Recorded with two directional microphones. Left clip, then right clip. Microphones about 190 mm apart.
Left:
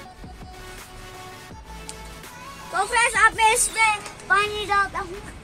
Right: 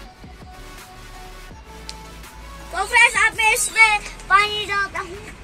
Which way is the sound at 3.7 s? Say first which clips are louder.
Right 6 dB; 55° left (ahead or behind).